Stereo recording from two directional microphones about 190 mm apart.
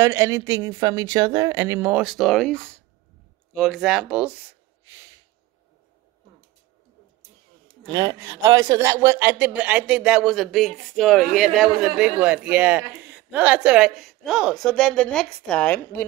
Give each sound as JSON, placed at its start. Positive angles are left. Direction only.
{"t": 0.0, "sound": "speech", "side_deg": -15}
{"t": 7.9, "sound": "speech", "side_deg": -20}